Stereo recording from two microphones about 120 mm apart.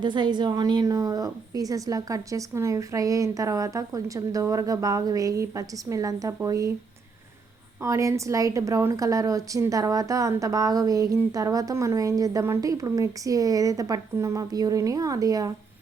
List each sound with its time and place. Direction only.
0.0 s a woman's voice: 40° right (ahead or behind)
7.8 s a woman's voice: 25° right (ahead or behind)